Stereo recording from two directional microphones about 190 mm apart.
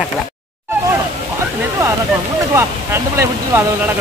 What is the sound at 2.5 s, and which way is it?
Speech, 15° right (ahead or behind).